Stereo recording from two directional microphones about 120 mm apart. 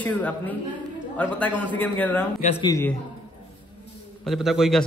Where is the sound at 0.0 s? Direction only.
15° left (ahead or behind).